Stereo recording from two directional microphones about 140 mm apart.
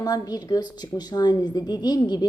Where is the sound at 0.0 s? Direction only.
30° left (ahead or behind).